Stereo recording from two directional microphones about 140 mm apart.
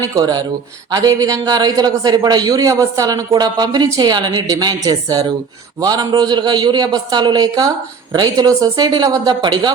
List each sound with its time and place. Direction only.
0.0 s a man's voice: 25° right (ahead or behind)